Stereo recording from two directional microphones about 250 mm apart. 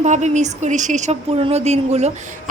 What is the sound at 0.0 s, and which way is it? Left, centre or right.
A woman's voice, right.